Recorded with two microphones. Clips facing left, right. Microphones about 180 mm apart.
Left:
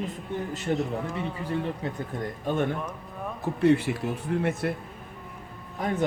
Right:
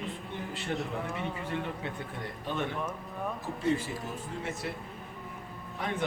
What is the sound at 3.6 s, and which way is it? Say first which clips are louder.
A man's voice: left 9 dB; 70° left (ahead or behind).